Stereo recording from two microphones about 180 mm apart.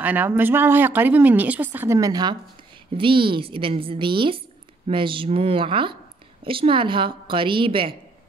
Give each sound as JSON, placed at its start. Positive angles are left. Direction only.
{"t": 0.0, "sound": "a woman's voice", "side_deg": -10}